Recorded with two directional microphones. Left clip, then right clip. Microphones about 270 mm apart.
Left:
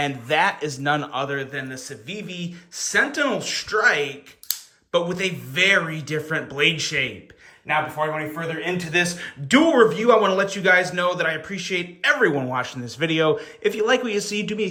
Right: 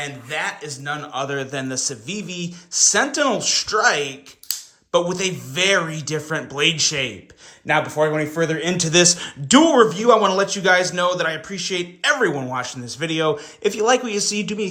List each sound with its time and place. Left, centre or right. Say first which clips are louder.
0.0 s a man's voice: left 5 dB; centre
7.7 s a man's voice: right 4 dB; centre